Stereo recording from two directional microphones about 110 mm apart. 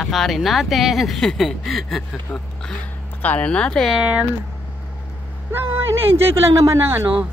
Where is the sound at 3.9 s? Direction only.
10° right (ahead or behind).